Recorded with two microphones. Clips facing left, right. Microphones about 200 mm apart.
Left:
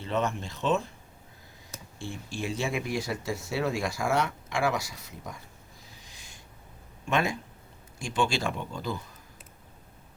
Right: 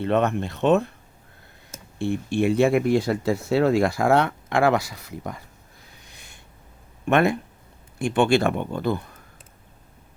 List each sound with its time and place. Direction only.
0.0 s speech: 60° right (ahead or behind)
2.0 s speech: 60° right (ahead or behind)
5.8 s a sound: 60° right (ahead or behind)
7.0 s speech: 60° right (ahead or behind)